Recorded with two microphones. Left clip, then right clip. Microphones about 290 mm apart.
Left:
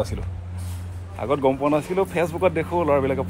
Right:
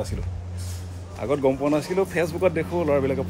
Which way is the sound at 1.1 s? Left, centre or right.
Centre.